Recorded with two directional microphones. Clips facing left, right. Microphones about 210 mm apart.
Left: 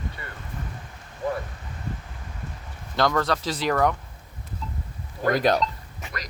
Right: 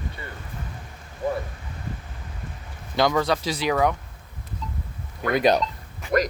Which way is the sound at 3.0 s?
10° right (ahead or behind).